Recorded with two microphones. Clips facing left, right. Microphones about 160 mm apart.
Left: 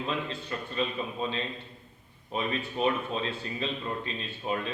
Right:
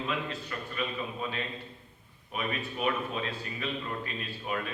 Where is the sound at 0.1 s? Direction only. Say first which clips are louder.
Left 2 dB; 25° left (ahead or behind).